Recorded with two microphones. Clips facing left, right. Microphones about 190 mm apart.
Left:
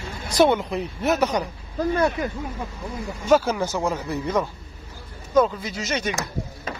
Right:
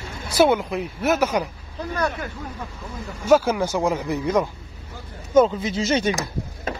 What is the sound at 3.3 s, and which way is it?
Speech, 10° right (ahead or behind).